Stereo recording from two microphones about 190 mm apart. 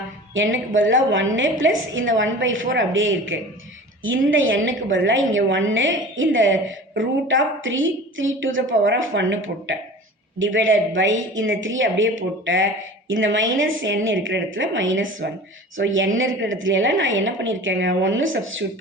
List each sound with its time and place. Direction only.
0.3 s a woman's voice: 90° right